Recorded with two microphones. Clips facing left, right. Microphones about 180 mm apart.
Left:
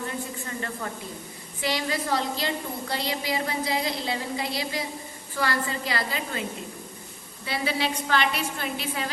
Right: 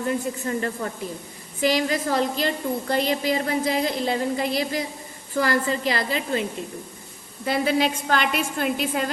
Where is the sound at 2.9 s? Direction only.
50° right (ahead or behind).